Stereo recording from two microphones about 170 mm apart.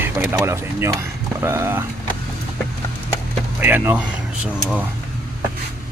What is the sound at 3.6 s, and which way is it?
Speech, 10° right (ahead or behind).